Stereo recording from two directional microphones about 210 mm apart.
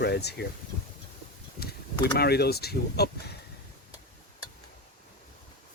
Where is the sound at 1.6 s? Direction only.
50° left (ahead or behind).